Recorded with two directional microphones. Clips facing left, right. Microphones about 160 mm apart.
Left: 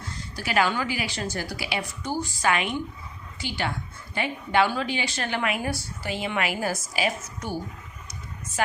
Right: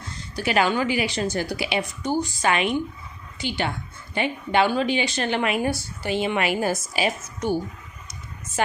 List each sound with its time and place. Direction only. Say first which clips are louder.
0.3 s speech: right 3 dB; 20° right (ahead or behind)